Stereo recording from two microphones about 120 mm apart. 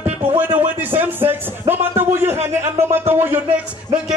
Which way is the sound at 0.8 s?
15° right (ahead or behind).